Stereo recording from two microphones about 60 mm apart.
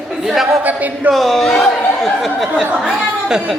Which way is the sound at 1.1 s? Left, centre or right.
Centre.